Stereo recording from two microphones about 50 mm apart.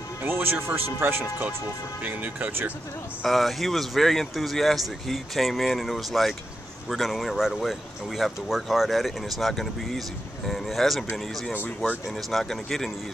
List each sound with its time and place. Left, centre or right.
0.2 s speech: right
2.0 s speech: right
3.3 s speech: centre